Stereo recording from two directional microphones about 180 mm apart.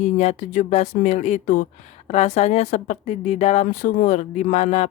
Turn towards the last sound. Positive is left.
turn(degrees=40)  # may be behind; listen again after turning